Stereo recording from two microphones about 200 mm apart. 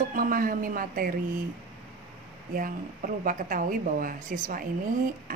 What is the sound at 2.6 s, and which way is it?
Speech, 45° right (ahead or behind).